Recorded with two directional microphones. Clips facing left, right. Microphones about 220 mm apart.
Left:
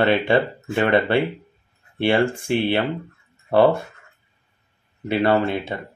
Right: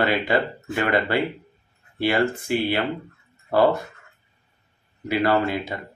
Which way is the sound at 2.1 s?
30° left (ahead or behind).